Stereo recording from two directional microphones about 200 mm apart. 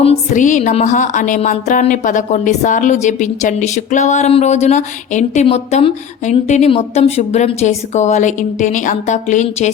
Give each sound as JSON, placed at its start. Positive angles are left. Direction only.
{"t": 0.0, "sound": "speech", "side_deg": 35}